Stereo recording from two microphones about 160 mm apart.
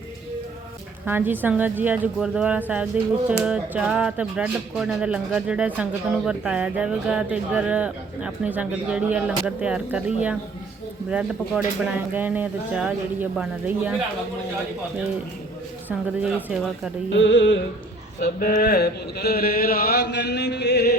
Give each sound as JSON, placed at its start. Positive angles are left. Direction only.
{"t": 1.0, "sound": "speech", "side_deg": -10}
{"t": 15.9, "sound": "speech", "side_deg": -5}
{"t": 18.2, "sound": "a sound", "side_deg": 65}